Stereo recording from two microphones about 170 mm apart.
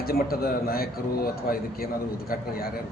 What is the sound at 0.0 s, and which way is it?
A man's voice, 60° left (ahead or behind).